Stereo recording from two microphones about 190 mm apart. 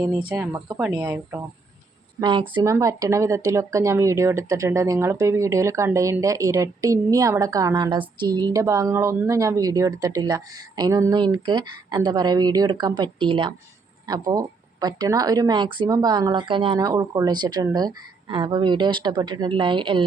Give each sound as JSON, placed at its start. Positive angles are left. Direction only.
{"t": 0.3, "sound": "speech", "side_deg": -10}
{"t": 2.2, "sound": "speech", "side_deg": -25}